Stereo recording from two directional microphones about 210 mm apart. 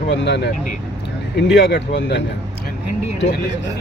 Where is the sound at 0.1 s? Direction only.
55° left (ahead or behind).